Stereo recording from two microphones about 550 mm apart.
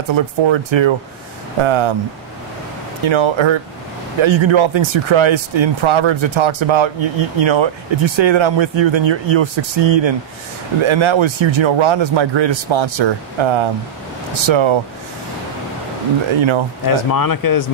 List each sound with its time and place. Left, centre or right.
0.1 s speech: right
3.1 s speech: right
16.3 s speech: right
16.8 s speech: left